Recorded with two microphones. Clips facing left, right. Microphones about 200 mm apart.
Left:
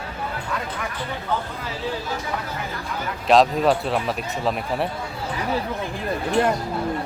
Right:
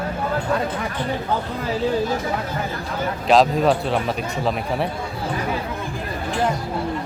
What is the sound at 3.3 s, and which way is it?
Speech, centre (ahead or behind).